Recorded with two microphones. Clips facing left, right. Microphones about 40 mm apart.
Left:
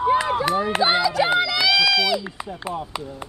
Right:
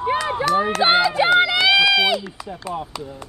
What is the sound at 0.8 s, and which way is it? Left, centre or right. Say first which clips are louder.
Speech: right 3 dB; right.